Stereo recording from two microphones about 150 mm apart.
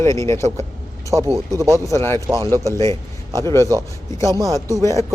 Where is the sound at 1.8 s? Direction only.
20° left (ahead or behind).